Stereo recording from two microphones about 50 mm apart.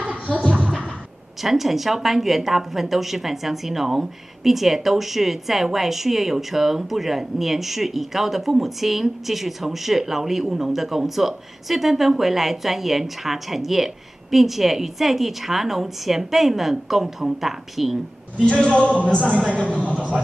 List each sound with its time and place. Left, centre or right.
0.0 s a sound: right
1.4 s a woman's voice: centre
18.4 s a man's voice: centre